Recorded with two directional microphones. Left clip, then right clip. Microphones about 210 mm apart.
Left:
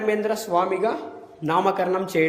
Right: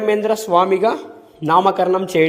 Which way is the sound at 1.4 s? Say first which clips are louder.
Right 7 dB; 35° right (ahead or behind).